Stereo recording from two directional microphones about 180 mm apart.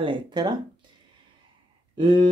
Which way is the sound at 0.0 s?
25° right (ahead or behind).